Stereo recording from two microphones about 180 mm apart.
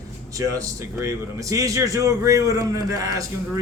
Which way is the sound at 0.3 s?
20° right (ahead or behind).